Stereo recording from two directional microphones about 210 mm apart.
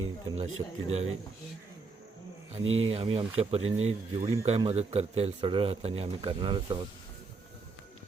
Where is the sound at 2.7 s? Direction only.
70° right (ahead or behind).